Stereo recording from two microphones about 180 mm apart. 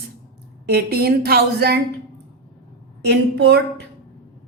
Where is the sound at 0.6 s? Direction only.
60° right (ahead or behind).